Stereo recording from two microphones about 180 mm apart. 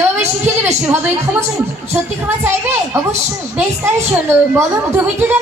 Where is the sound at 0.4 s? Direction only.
15° right (ahead or behind).